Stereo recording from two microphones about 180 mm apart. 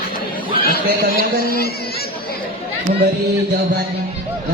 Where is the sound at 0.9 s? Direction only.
55° right (ahead or behind).